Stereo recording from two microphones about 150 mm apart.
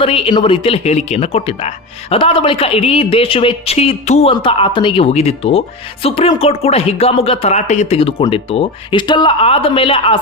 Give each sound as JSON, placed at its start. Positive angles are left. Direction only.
{"t": 0.0, "sound": "speech", "side_deg": 35}